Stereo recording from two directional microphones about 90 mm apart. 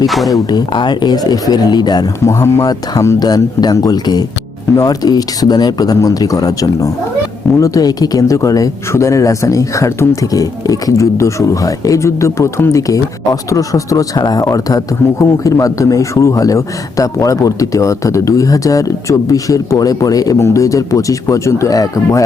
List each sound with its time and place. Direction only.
0.3 s speech: 40° left (ahead or behind)
0.7 s speech: 55° left (ahead or behind)
2.2 s speech: 35° left (ahead or behind)
3.2 s speech: 50° left (ahead or behind)